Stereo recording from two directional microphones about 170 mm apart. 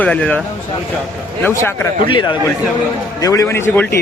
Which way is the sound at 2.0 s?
30° left (ahead or behind).